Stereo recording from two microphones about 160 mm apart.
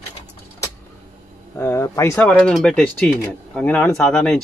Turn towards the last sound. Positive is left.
turn(degrees=5)  # may be behind; listen again after turning